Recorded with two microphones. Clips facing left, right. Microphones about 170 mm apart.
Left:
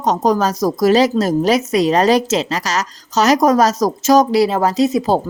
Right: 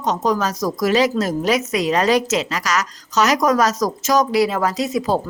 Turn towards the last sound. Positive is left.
turn(degrees=30)  # may be behind; listen again after turning